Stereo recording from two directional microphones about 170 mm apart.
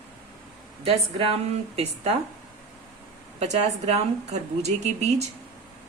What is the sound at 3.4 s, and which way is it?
A woman's voice, 40° right (ahead or behind).